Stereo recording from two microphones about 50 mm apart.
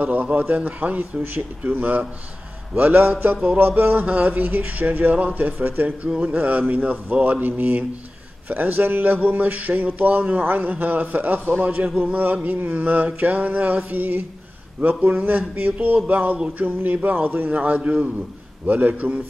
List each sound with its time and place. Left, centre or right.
0.0 s a man's voice: right
4.0 s a man's voice: right
10.4 s a man's voice: right
15.2 s a man's voice: right